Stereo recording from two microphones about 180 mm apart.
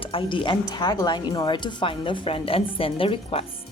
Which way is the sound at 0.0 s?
30° left (ahead or behind).